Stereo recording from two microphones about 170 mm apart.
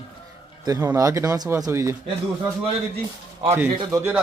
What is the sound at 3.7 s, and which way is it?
Speech, 25° right (ahead or behind).